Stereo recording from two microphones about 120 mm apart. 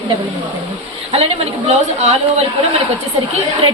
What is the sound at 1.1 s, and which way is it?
Speech, 60° right (ahead or behind).